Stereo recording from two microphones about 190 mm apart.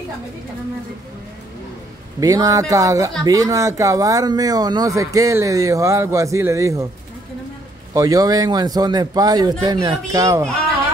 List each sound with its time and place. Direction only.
2.1 s speech: 20° right (ahead or behind)
7.9 s speech: 20° right (ahead or behind)